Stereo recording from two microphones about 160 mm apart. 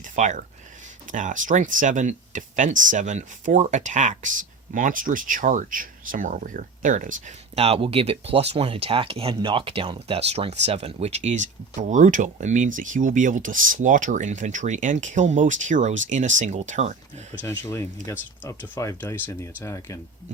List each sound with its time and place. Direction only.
0.0 s speech: 50° right (ahead or behind)
17.4 s speech: 20° left (ahead or behind)